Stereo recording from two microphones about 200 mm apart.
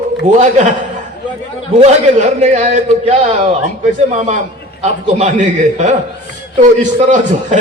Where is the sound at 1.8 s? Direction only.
35° right (ahead or behind).